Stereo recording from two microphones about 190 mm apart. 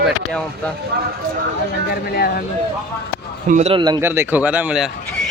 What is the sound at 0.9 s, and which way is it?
Speech, 60° right (ahead or behind).